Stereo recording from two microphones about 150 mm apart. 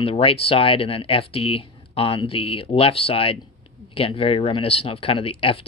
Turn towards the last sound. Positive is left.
turn(degrees=40)  # may be behind; listen again after turning